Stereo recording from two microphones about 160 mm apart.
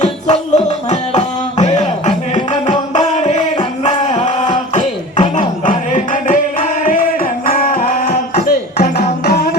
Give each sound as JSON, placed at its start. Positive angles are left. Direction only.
{"t": 0.0, "sound": "music", "side_deg": 45}
{"t": 1.7, "sound": "music", "side_deg": 30}
{"t": 5.6, "sound": "music", "side_deg": 50}